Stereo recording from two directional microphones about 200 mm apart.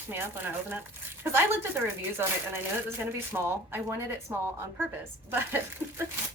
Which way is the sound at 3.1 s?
10° right (ahead or behind).